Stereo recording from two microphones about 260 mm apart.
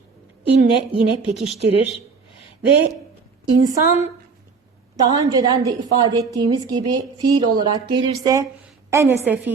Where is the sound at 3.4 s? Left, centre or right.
Centre.